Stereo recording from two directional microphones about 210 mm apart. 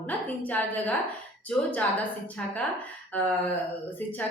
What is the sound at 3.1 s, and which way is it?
Speech, 10° left (ahead or behind).